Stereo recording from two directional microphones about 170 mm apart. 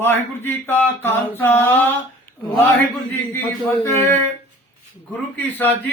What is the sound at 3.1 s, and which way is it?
A man's voice, 15° left (ahead or behind).